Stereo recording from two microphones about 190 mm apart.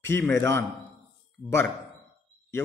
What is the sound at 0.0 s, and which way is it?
Speech, 15° left (ahead or behind).